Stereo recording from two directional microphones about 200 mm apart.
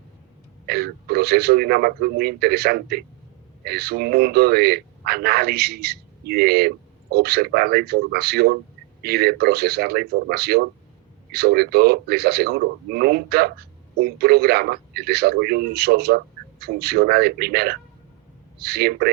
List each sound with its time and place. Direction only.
0.7 s speech: 50° right (ahead or behind)